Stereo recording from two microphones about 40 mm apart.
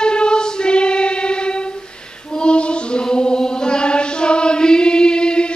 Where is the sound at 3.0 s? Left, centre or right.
Centre.